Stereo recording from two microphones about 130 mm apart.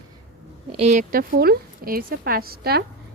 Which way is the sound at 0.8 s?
65° right (ahead or behind).